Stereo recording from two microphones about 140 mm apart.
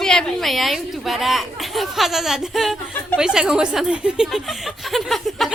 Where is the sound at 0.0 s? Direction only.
5° left (ahead or behind).